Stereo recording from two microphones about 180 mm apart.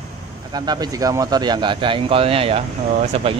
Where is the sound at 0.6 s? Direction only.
20° right (ahead or behind).